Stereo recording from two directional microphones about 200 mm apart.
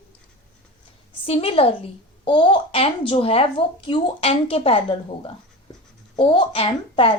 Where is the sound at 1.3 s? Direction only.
30° left (ahead or behind).